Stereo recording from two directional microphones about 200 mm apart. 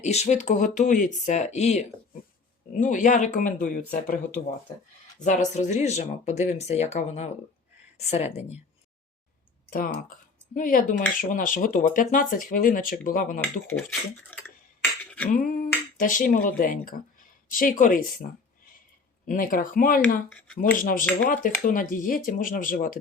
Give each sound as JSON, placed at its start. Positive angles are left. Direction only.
{"t": 0.0, "sound": "speech", "side_deg": 35}
{"t": 5.2, "sound": "speech", "side_deg": 35}
{"t": 9.6, "sound": "speech", "side_deg": 45}
{"t": 13.4, "sound": "speech", "side_deg": 10}
{"t": 15.3, "sound": "speech", "side_deg": 40}